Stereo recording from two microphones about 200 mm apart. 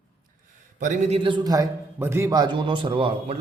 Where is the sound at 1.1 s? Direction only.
25° right (ahead or behind).